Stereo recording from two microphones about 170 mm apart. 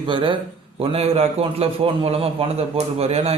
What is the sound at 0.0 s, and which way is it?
A man's voice, 30° right (ahead or behind).